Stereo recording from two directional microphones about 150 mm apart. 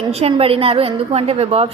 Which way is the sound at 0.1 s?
40° right (ahead or behind).